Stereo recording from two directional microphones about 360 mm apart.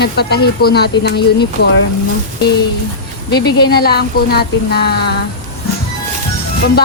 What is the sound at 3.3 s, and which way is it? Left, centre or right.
A woman's voice, left.